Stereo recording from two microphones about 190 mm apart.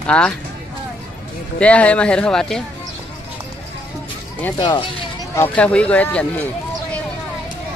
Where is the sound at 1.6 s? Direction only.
5° left (ahead or behind).